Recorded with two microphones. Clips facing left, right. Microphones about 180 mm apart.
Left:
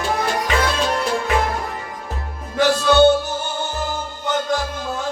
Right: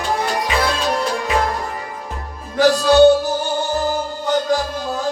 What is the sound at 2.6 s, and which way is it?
Music, 35° right (ahead or behind).